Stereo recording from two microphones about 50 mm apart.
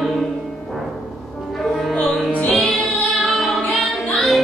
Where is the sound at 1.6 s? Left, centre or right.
Centre.